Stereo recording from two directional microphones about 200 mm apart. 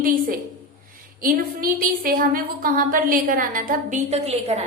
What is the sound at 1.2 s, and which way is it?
A woman's voice, 45° right (ahead or behind).